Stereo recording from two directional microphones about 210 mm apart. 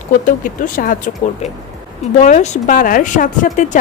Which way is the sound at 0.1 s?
40° left (ahead or behind).